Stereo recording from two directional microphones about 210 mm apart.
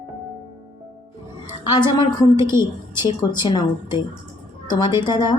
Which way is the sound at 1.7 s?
20° left (ahead or behind).